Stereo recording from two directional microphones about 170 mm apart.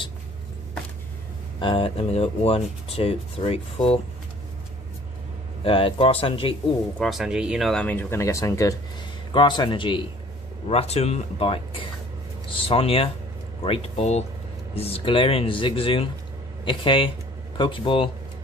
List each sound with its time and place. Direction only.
1.6 s speech: 30° left (ahead or behind)
5.6 s speech: 30° left (ahead or behind)
7.0 s a man's voice: centre (ahead or behind); by 18.1 s 30° left (ahead or behind)